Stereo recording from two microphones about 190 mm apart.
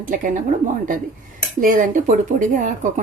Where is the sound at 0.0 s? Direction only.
45° right (ahead or behind).